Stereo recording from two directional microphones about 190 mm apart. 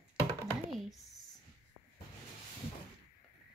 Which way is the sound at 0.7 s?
Centre (ahead or behind).